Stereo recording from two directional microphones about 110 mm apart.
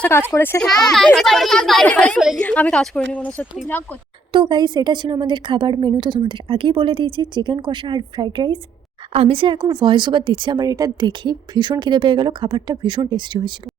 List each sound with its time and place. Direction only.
0.1 s speech: 20° left (ahead or behind)
0.6 s a child's voice: 5° left (ahead or behind)
2.1 s a child's voice: 5° right (ahead or behind)
2.4 s speech: 15° left (ahead or behind)
4.3 s a woman's voice: 45° right (ahead or behind)
9.1 s a woman's voice: 60° right (ahead or behind)